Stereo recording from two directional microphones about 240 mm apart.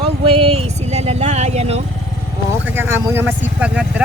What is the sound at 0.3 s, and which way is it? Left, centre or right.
Vehicle, right.